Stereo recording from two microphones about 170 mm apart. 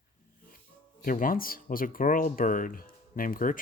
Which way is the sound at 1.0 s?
55° left (ahead or behind).